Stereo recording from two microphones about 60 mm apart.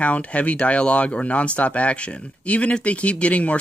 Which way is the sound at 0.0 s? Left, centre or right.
Left.